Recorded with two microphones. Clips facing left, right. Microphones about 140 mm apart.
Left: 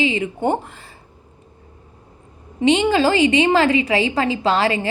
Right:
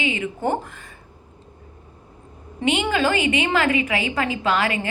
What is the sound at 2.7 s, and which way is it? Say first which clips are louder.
A woman's voice: left 5 dB; 35° left (ahead or behind).